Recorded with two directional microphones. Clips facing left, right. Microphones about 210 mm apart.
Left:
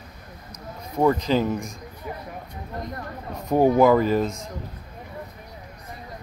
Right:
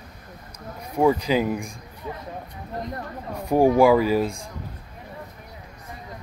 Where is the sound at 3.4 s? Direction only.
10° right (ahead or behind).